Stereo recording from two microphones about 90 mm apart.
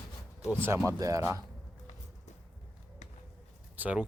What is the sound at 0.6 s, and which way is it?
Speech, 30° right (ahead or behind).